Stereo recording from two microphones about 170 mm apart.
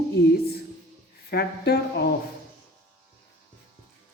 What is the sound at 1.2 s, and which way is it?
Speech, 70° left (ahead or behind).